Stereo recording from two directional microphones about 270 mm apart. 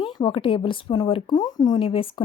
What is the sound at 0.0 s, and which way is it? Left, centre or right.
Speech, centre.